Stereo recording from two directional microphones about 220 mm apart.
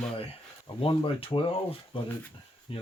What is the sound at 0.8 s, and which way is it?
Speech, 25° left (ahead or behind).